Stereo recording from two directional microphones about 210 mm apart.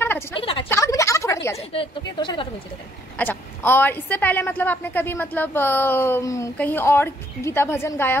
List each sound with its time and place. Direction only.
0.4 s a woman's voice: 25° left (ahead or behind)
0.7 s a sound: 15° left (ahead or behind)
1.6 s a woman's voice: 25° left (ahead or behind)
3.2 s a woman's voice: 10° left (ahead or behind)